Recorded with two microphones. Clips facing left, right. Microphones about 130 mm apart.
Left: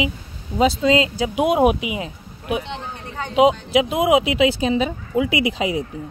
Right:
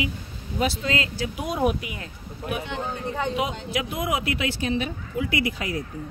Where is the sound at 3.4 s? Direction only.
90° left.